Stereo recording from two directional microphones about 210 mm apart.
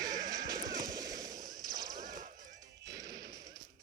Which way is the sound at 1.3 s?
45° right (ahead or behind).